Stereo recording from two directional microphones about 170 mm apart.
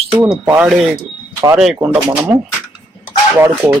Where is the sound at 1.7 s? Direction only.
10° right (ahead or behind).